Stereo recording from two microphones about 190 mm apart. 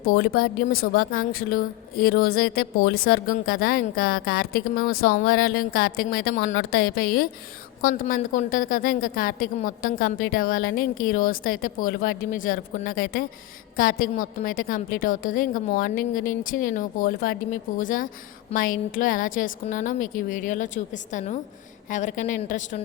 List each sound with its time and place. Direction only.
0.0 s speech: 50° left (ahead or behind)